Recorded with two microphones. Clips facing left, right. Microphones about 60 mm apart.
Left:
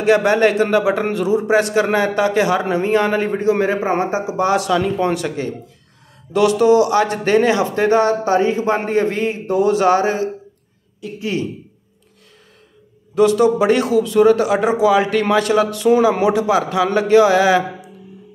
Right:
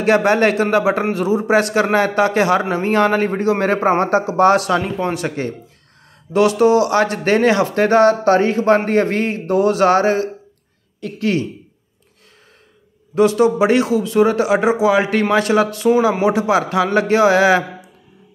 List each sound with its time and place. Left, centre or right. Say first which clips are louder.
0.0 s a man's voice: even; right
3.5 s a man's voice: right 2 dB; right
4.4 s a man's voice: right 2 dB; right
11.0 s speech: right 2 dB; right
13.1 s a man's voice: even; right